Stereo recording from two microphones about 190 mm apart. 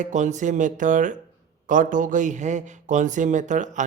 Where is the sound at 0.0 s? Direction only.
40° right (ahead or behind).